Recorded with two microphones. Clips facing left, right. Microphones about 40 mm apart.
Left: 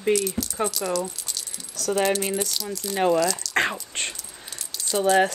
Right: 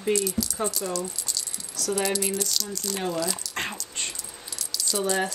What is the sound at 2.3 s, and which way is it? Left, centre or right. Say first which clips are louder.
Speech: left 2 dB; left.